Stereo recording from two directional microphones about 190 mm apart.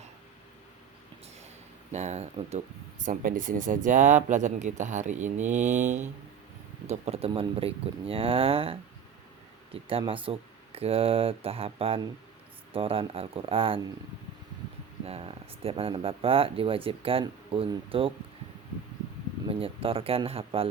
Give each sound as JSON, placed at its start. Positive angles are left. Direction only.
{"t": 1.9, "sound": "speech", "side_deg": -35}
{"t": 3.0, "sound": "speech", "side_deg": -45}
{"t": 10.1, "sound": "speech", "side_deg": -30}
{"t": 15.0, "sound": "speech", "side_deg": -30}
{"t": 19.5, "sound": "speech", "side_deg": -30}